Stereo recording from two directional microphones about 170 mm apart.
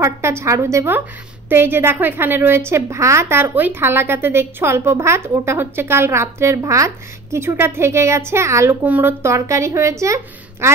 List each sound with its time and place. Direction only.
0.0 s a woman's voice: 15° right (ahead or behind)